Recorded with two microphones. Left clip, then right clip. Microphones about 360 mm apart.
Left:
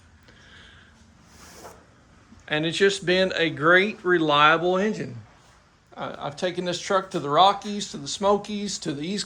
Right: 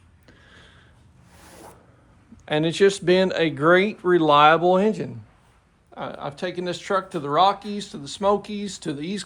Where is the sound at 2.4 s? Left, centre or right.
Centre.